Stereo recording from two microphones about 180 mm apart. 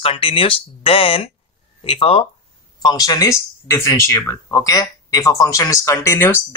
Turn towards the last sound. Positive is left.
turn(degrees=15)  # may be behind; listen again after turning